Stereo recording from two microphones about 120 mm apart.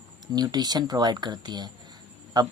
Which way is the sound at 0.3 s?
35° right (ahead or behind).